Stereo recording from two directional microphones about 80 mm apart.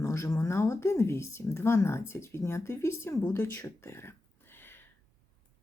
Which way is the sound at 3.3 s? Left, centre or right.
Left.